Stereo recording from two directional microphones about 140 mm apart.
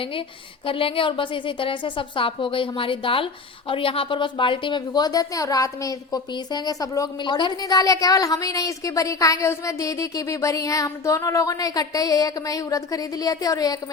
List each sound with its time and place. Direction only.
0.0 s a woman's voice: 40° left (ahead or behind)